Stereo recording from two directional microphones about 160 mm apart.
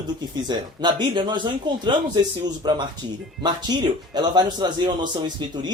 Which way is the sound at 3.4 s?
30° right (ahead or behind).